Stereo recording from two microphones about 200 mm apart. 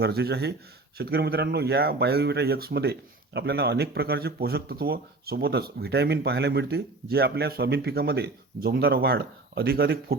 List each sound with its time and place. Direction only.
0.0 s speech: 55° right (ahead or behind)